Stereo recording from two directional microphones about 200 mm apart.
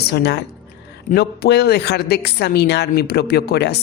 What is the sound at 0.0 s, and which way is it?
A woman's voice, 55° left (ahead or behind).